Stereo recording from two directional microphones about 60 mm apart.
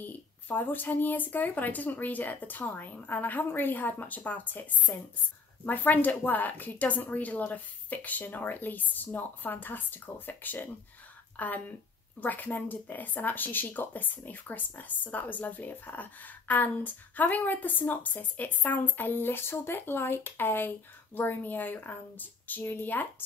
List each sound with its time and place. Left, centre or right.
0.0 s speech: left